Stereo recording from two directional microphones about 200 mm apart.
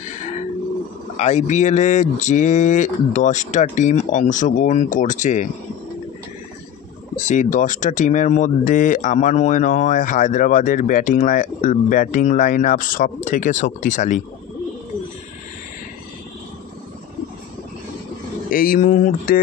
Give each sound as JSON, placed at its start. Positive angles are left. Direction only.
{"t": 0.0, "sound": "a sound", "side_deg": 35}
{"t": 1.1, "sound": "speech", "side_deg": 35}
{"t": 7.2, "sound": "speech", "side_deg": 35}
{"t": 18.5, "sound": "speech", "side_deg": 45}